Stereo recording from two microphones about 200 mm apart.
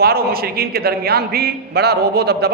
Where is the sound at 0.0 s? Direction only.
50° right (ahead or behind).